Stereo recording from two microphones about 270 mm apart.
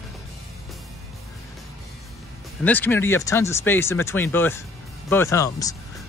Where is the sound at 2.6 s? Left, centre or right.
Centre.